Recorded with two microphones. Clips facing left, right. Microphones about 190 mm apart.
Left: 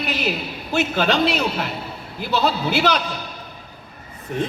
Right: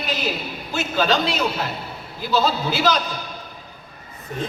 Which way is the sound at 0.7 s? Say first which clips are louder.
Left 1 dB; 65° left (ahead or behind).